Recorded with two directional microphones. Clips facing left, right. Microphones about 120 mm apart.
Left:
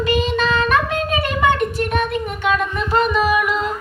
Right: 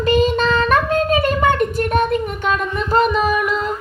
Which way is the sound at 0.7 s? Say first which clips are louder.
Right 3 dB; 40° right (ahead or behind).